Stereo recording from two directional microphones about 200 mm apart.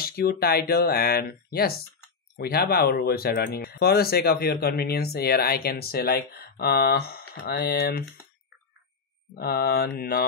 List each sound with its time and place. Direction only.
0.0 s speech: 50° left (ahead or behind)
9.3 s speech: 50° left (ahead or behind)